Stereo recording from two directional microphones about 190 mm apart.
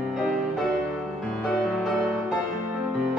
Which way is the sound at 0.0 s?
Centre (ahead or behind).